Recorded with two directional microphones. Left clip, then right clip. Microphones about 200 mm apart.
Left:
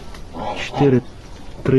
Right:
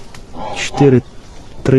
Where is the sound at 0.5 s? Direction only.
50° right (ahead or behind).